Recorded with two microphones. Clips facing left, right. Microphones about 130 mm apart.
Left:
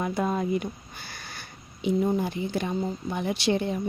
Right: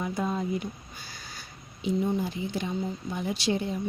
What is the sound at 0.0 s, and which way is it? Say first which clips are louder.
Speech: left 3 dB; 60° left (ahead or behind).